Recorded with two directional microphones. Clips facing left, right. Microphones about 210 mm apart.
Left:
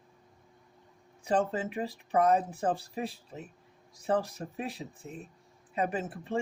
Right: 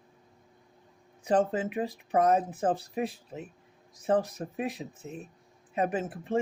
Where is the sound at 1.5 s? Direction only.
20° right (ahead or behind).